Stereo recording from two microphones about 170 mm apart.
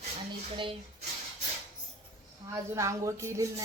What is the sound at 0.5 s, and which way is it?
Speech, 30° right (ahead or behind).